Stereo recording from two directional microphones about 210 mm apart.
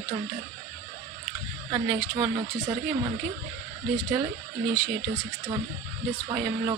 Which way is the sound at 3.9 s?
20° right (ahead or behind).